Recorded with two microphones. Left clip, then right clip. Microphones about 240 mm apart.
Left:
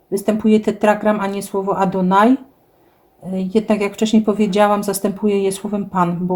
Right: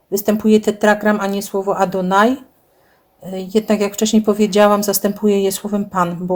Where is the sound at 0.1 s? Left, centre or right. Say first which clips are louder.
Right 2 dB; right.